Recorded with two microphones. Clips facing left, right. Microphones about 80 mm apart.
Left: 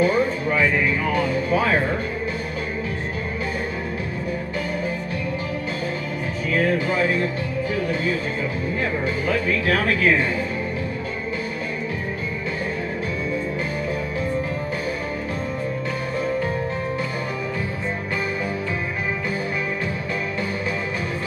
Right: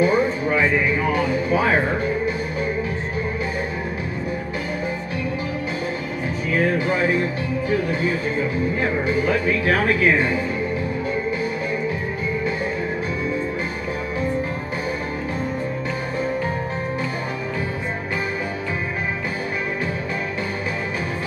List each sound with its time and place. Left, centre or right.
0.0 s music: centre
1.1 s speech: right
6.5 s music: right
8.8 s speech: right